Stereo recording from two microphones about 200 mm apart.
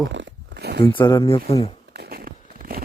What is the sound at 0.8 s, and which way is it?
Speech, 20° left (ahead or behind).